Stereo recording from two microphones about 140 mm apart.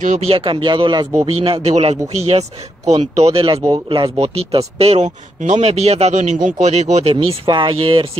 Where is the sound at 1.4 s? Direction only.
45° right (ahead or behind).